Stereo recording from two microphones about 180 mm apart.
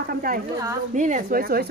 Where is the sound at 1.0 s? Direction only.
45° right (ahead or behind).